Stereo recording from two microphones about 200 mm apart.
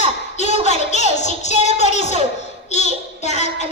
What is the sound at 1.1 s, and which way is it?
Music, 35° left (ahead or behind).